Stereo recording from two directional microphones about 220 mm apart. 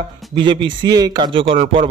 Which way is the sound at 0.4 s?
20° right (ahead or behind).